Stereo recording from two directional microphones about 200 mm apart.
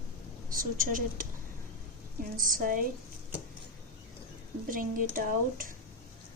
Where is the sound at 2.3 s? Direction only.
45° right (ahead or behind).